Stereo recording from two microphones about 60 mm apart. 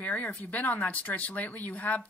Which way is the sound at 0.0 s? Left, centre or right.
Left.